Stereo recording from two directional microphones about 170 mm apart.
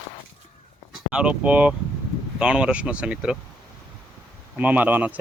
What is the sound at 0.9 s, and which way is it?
Speech, 5° right (ahead or behind).